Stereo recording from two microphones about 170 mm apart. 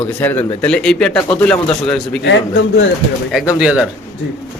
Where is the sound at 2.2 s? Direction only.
90° left.